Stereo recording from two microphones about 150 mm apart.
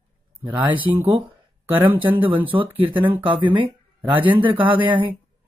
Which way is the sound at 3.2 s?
35° right (ahead or behind).